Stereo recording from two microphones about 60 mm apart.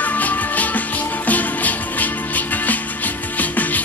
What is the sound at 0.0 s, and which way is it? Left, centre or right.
Music, left.